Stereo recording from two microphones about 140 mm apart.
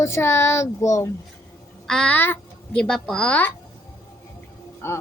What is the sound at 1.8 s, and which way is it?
A woman's voice, 5° left (ahead or behind).